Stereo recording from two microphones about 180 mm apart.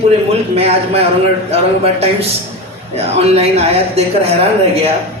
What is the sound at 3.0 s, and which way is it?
A man's voice, 35° right (ahead or behind).